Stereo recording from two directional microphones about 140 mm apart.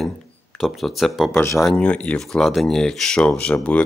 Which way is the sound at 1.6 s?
10° left (ahead or behind).